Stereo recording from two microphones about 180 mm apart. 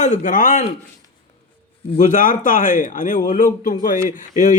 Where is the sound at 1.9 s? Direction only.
45° left (ahead or behind).